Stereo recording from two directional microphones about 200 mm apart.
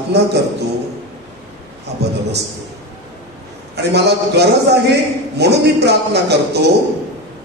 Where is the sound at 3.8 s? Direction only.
55° right (ahead or behind).